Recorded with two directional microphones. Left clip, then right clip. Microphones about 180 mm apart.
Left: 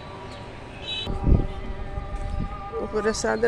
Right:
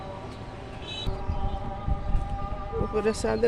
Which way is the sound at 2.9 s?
Centre (ahead or behind).